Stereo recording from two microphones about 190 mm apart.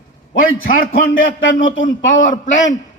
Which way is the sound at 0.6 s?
45° left (ahead or behind).